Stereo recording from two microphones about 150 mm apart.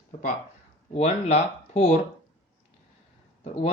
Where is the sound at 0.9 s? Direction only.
45° left (ahead or behind).